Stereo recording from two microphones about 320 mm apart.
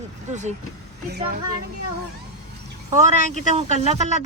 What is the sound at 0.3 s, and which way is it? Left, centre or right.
Speech, right.